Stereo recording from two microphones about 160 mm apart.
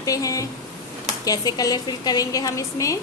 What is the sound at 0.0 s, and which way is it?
A woman's voice, 20° left (ahead or behind).